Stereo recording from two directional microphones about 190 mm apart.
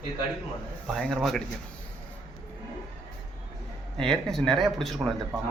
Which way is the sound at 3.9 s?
5° left (ahead or behind).